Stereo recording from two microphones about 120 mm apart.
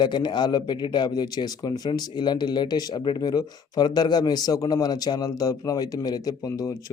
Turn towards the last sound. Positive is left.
turn(degrees=30)  # may be behind; listen again after turning